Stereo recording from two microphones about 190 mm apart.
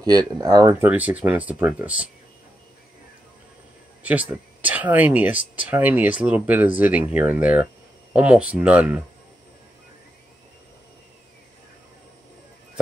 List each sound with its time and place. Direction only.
0.0 s speech: 20° right (ahead or behind)
0.8 s speech: 5° right (ahead or behind)
4.0 s speech: 10° right (ahead or behind)